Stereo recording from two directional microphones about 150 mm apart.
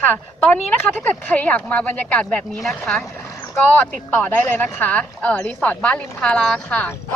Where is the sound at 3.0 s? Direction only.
20° left (ahead or behind).